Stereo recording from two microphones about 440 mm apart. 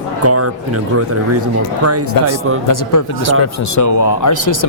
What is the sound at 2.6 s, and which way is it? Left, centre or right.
Speech, left.